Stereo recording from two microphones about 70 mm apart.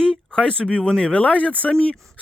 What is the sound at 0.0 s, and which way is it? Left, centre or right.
Speech, centre.